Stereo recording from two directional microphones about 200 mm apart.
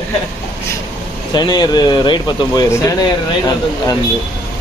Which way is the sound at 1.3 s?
20° left (ahead or behind).